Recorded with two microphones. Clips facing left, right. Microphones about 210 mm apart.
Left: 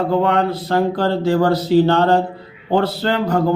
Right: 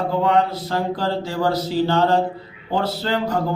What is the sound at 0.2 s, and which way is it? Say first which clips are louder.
A man's voice: left 2 dB; 60° left (ahead or behind).